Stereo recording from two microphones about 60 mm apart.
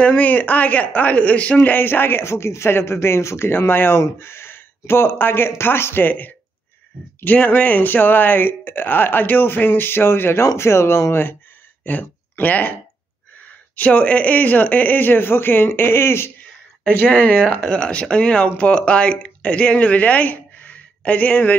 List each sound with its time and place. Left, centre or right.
0.0 s speech: left
11.8 s speech: left
13.7 s speech: left
16.9 s speech: left
17.7 s speech: centre